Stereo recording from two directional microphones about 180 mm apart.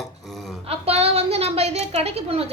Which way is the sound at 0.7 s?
35° right (ahead or behind).